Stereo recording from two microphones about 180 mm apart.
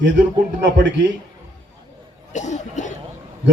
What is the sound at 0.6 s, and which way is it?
Speech, 90° right.